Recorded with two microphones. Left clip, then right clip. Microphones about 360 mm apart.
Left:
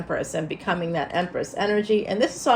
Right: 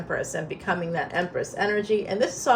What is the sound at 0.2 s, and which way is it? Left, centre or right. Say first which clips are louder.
A woman's voice: left 2 dB; centre.